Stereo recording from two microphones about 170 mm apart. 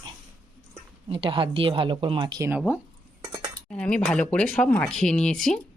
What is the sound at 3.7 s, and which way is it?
Speech, 5° left (ahead or behind).